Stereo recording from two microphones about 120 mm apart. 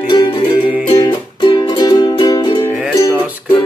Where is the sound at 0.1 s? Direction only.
45° left (ahead or behind).